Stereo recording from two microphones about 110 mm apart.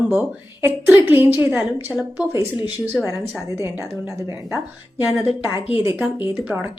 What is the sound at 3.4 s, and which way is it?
A woman's voice, 25° right (ahead or behind).